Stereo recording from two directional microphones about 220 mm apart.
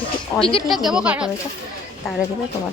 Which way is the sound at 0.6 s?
Centre (ahead or behind).